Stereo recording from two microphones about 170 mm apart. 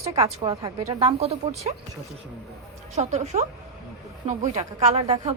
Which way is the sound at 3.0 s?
45° right (ahead or behind).